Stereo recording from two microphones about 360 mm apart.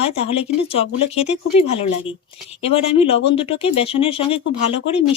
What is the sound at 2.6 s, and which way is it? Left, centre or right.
Speech, centre.